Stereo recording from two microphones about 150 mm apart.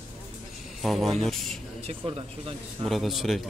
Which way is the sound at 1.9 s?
40° right (ahead or behind).